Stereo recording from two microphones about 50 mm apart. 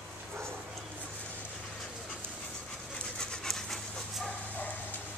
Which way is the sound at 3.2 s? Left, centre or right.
Centre.